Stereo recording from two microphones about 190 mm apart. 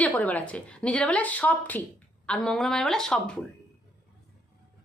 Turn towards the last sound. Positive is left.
turn(degrees=5)  # may be behind; listen again after turning